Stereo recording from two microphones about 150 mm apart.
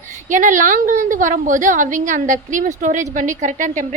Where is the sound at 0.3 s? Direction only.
60° right (ahead or behind).